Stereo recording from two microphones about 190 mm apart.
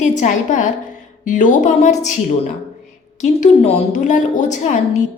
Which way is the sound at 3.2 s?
40° left (ahead or behind).